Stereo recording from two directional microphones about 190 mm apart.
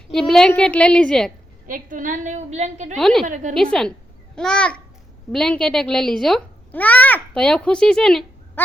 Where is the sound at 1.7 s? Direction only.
45° right (ahead or behind).